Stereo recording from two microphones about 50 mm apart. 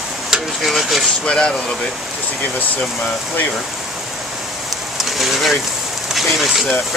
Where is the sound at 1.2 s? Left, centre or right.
Centre.